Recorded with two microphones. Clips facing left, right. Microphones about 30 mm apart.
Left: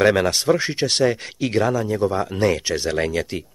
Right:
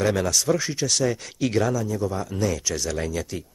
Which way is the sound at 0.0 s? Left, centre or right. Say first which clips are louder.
Left 6 dB; left.